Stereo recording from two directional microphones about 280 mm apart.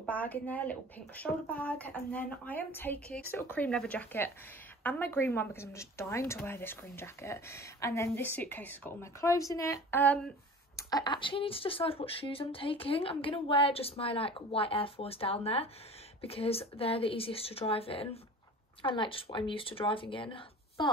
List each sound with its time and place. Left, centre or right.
0.0 s speech: centre